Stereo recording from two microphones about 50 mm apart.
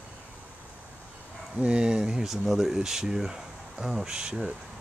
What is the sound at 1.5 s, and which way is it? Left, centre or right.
Speech, centre.